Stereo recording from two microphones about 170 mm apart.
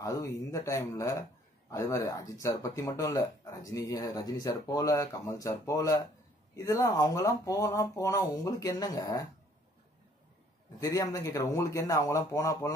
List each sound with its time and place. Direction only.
0.0 s speech: 20° left (ahead or behind)
10.8 s speech: 20° left (ahead or behind)